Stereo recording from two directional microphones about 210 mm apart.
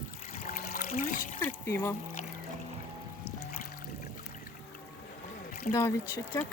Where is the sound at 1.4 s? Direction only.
10° left (ahead or behind).